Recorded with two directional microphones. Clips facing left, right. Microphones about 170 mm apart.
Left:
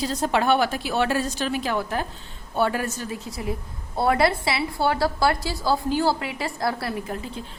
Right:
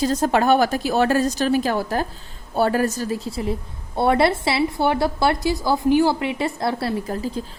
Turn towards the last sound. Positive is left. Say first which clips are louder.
# right 5 dB
turn(degrees=-30)  # may be behind; listen again after turning